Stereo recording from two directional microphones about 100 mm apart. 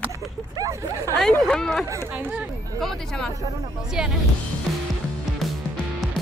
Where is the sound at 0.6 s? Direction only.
35° right (ahead or behind).